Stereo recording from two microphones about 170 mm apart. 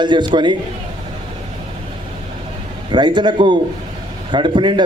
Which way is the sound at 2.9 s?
25° right (ahead or behind).